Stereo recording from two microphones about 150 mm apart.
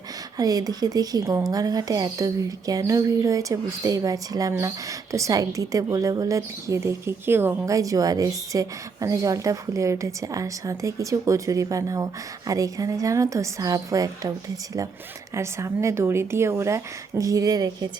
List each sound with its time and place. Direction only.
0.3 s speech: 25° right (ahead or behind)
15.4 s speech: 20° right (ahead or behind)